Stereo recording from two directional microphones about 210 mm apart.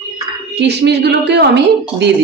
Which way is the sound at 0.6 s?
55° right (ahead or behind).